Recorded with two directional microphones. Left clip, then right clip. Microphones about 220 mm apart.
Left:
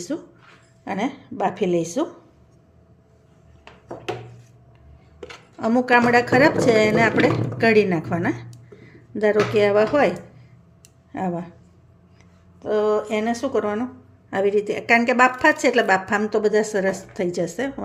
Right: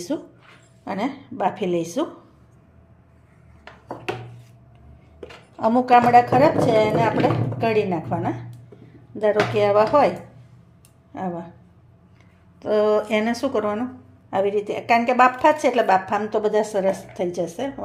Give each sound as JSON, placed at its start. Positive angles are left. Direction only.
{"t": 0.1, "sound": "a woman's voice", "side_deg": 0}
{"t": 5.5, "sound": "a woman's voice", "side_deg": 10}
{"t": 12.5, "sound": "a woman's voice", "side_deg": 0}